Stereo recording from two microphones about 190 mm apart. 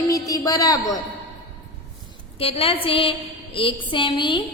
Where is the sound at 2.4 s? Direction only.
30° left (ahead or behind).